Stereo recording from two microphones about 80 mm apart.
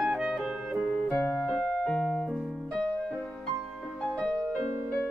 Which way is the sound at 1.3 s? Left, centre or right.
Centre.